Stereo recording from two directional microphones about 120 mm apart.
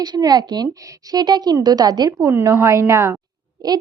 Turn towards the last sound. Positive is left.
turn(degrees=-35)  # may be behind; listen again after turning